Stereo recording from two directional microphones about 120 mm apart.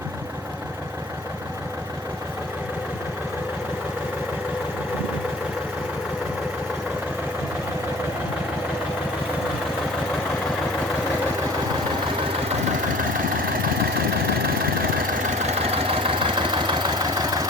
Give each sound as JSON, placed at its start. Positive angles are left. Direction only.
{"t": 15.4, "sound": "vehicle", "side_deg": -55}